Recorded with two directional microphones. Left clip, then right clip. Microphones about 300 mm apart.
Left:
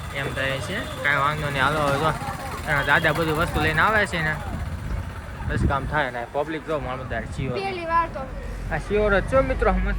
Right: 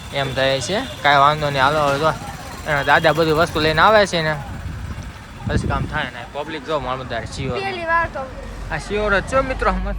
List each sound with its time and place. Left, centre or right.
0.2 s speech: centre
5.5 s speech: centre
7.5 s speech: right
8.7 s speech: centre